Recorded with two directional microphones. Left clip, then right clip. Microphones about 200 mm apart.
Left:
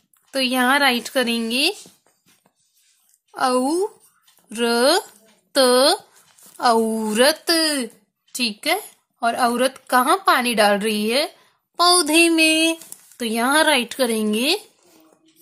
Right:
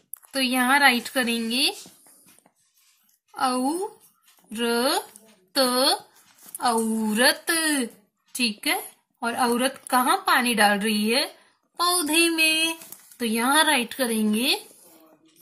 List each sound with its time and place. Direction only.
0.3 s a woman's voice: 55° left (ahead or behind)
3.3 s a woman's voice: 55° left (ahead or behind)